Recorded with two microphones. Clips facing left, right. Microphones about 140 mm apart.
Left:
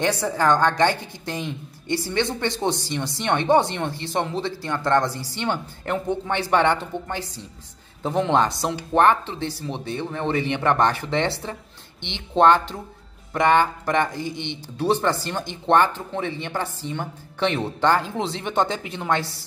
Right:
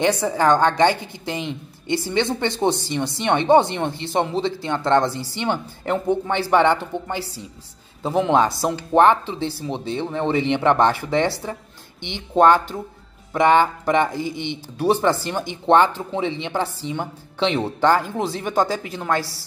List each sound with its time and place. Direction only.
0.0 s a woman's voice: 15° right (ahead or behind)